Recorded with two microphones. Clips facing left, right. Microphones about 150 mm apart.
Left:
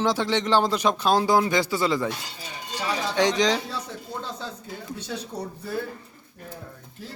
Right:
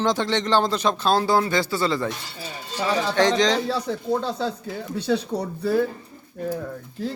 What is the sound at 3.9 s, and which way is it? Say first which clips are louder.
Speech: right 10 dB; 80° right.